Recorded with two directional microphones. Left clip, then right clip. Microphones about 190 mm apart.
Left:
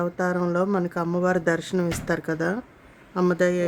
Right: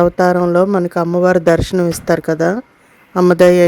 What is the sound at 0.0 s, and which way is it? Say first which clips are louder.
Speech: right 13 dB; 45° right (ahead or behind).